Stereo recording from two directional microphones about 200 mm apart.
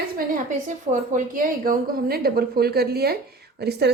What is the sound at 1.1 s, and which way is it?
A woman's voice, 45° right (ahead or behind).